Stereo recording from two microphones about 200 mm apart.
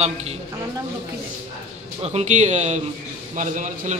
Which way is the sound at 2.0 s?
35° right (ahead or behind).